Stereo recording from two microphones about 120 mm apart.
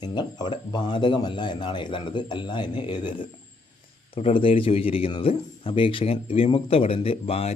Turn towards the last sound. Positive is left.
turn(degrees=55)  # may be behind; listen again after turning